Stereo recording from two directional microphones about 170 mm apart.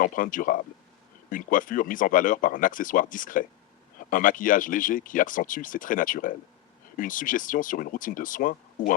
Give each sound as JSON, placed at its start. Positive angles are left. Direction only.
{"t": 0.0, "sound": "speech", "side_deg": 55}